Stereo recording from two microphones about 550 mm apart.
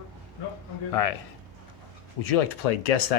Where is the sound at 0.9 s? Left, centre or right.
Left.